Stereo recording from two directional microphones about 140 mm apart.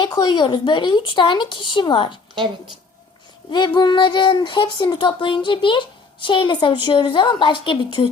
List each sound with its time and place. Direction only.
0.0 s speech: 35° left (ahead or behind)
3.5 s speech: 30° left (ahead or behind)